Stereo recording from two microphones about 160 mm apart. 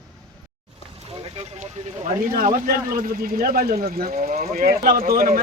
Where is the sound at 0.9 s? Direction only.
35° right (ahead or behind).